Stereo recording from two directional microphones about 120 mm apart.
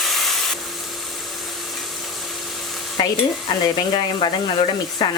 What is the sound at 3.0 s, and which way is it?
Stir, 35° left (ahead or behind).